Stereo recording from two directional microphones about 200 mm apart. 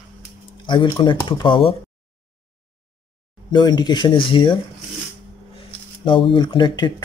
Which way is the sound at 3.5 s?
20° left (ahead or behind).